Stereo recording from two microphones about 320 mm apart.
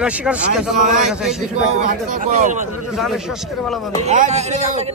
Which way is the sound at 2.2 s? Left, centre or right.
Right.